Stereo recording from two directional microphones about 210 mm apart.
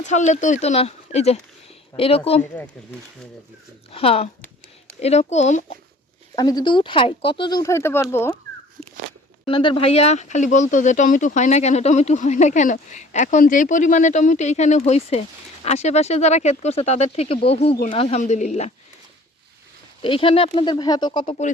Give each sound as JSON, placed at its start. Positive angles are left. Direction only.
{"t": 0.0, "sound": "speech", "side_deg": 35}
{"t": 3.9, "sound": "speech", "side_deg": 30}
{"t": 6.3, "sound": "speech", "side_deg": 20}
{"t": 8.8, "sound": "a sound", "side_deg": 5}
{"t": 9.5, "sound": "speech", "side_deg": 25}
{"t": 20.0, "sound": "speech", "side_deg": 25}